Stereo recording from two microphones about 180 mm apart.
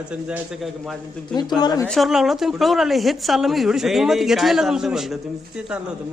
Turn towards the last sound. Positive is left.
turn(degrees=-5)  # may be behind; listen again after turning